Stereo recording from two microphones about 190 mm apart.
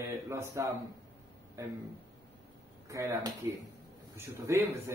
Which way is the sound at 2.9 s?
15° right (ahead or behind).